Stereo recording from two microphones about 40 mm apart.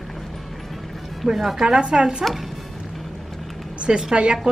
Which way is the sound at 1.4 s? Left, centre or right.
Centre.